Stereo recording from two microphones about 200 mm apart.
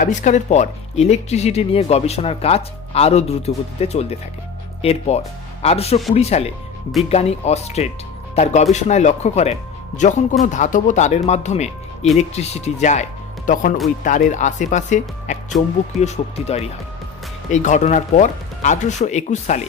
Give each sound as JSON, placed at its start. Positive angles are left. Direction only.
{"t": 0.0, "sound": "speech", "side_deg": 35}